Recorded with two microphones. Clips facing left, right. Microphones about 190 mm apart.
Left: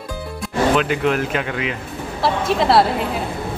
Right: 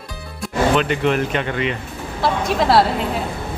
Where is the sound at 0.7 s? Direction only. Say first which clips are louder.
Even; centre (ahead or behind).